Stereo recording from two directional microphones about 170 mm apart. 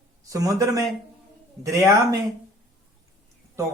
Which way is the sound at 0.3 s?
20° right (ahead or behind).